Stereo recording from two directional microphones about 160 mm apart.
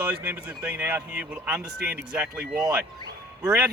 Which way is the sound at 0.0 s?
15° right (ahead or behind).